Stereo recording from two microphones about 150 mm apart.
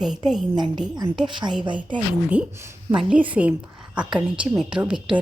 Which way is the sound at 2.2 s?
10° right (ahead or behind).